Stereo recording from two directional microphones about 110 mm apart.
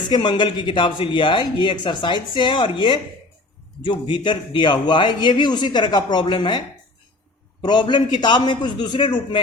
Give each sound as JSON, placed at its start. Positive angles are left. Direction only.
{"t": 0.1, "sound": "speech", "side_deg": 45}
{"t": 7.6, "sound": "speech", "side_deg": 40}